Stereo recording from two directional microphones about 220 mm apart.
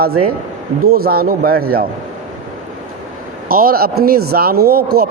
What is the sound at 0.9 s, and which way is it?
Speech, 45° right (ahead or behind).